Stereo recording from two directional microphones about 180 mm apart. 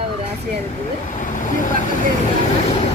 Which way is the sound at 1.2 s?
45° left (ahead or behind).